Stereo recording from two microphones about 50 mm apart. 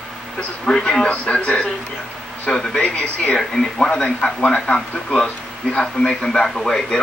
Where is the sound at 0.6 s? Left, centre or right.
Centre.